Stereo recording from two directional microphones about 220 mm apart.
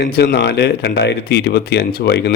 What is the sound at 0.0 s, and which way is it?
Speech, 45° left (ahead or behind).